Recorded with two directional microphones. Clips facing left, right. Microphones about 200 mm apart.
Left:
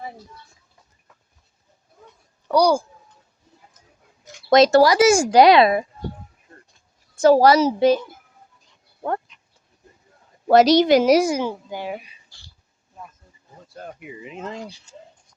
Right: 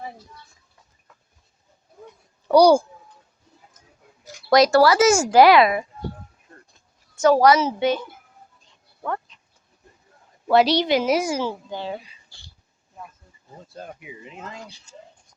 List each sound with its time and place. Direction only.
2.5 s a child's voice: 25° right (ahead or behind)
4.4 s speech: 20° left (ahead or behind)
7.2 s a woman's voice: 30° left (ahead or behind)
10.5 s a woman's voice: 45° left (ahead or behind)
11.3 s a child's voice: 15° left (ahead or behind)
14.0 s speech: centre (ahead or behind)